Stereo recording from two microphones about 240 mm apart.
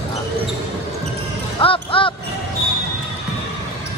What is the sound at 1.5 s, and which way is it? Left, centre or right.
Music, left.